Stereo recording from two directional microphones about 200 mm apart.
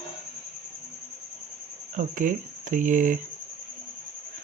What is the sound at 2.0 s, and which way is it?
Speech, 40° right (ahead or behind).